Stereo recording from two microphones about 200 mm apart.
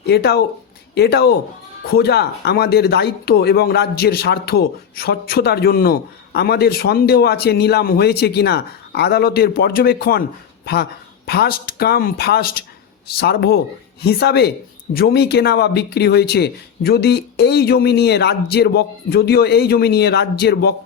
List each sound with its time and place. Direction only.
0.0 s speech: 55° left (ahead or behind)
11.3 s speech: 50° left (ahead or behind)